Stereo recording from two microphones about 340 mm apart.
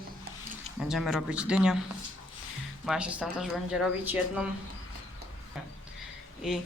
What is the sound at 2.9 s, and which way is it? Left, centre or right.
Speech, centre.